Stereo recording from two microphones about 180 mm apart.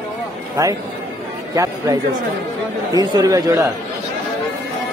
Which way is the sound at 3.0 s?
20° right (ahead or behind).